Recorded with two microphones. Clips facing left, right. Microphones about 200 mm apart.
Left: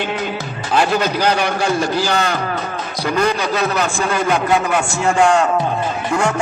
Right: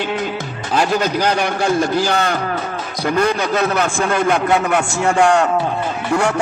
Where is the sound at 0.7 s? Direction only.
45° right (ahead or behind).